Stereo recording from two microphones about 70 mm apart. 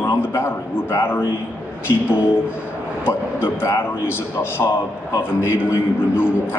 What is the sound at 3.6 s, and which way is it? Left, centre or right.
A man's voice, left.